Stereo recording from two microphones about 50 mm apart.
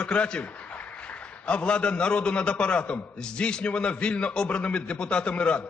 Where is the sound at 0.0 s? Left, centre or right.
Left.